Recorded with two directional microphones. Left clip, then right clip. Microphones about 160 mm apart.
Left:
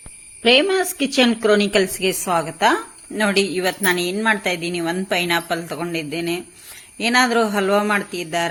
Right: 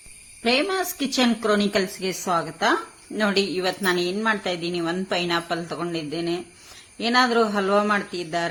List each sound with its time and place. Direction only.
0.4 s a woman's voice: 20° left (ahead or behind)